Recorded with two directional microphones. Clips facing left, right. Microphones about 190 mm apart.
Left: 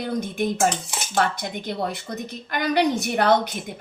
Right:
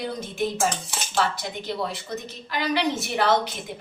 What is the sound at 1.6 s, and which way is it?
A woman's voice, 55° left (ahead or behind).